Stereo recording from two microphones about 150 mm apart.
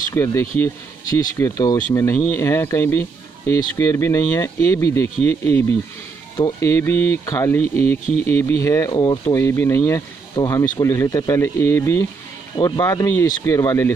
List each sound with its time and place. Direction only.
0.1 s speech: 15° left (ahead or behind)